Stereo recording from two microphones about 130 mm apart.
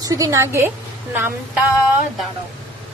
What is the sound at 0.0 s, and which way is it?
Speech, 25° right (ahead or behind).